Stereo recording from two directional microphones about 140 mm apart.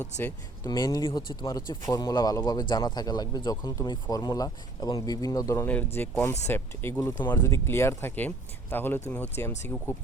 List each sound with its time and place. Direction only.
0.6 s a man's voice: 25° left (ahead or behind)
5.6 s speech: 10° left (ahead or behind)